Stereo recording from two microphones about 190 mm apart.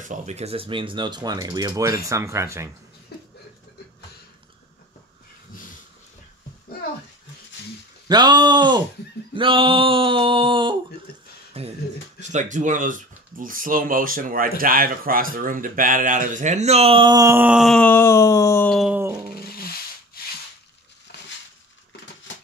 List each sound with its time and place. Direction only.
0.0 s speech: 40° right (ahead or behind); by 2.7 s 15° right (ahead or behind)
8.1 s speech: 20° right (ahead or behind)
11.6 s beatboxing: 30° right (ahead or behind)
12.2 s speech: 40° right (ahead or behind); by 18.8 s 10° left (ahead or behind)
18.8 s speech: 10° right (ahead or behind)